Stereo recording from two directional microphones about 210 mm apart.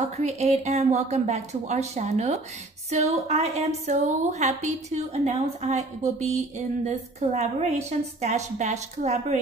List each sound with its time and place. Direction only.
0.0 s a woman's voice: 30° right (ahead or behind)